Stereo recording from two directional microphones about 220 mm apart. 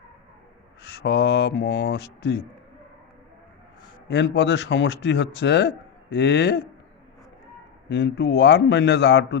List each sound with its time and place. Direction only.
0.8 s speech: 45° left (ahead or behind)
4.1 s speech: 50° left (ahead or behind)
7.9 s speech: 50° left (ahead or behind)